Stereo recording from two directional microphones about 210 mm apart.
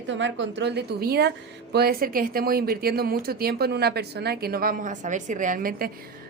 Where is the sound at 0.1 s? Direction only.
60° right (ahead or behind).